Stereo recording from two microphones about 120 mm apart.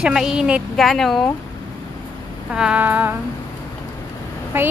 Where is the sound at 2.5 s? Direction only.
5° right (ahead or behind).